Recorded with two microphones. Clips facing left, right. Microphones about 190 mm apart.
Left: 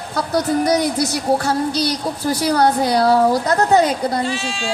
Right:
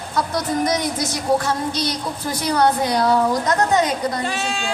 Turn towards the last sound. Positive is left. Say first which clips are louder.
# left 1 dB
turn(degrees=-55)  # may be behind; listen again after turning